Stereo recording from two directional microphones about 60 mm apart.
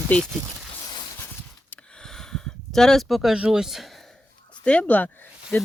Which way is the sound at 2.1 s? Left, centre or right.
Centre.